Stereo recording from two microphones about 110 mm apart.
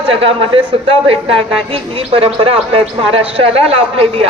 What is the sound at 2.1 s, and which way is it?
A man's voice, 60° right (ahead or behind).